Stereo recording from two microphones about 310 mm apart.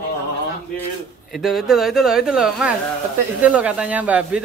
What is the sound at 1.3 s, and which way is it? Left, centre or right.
Speech, centre.